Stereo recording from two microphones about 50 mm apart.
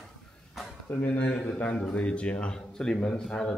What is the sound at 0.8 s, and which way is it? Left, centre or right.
Speech, left.